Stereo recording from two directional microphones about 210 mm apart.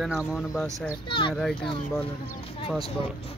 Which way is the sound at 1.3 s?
Centre (ahead or behind).